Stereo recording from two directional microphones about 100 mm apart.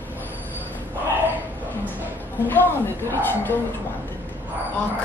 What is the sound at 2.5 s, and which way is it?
Speech, 20° left (ahead or behind).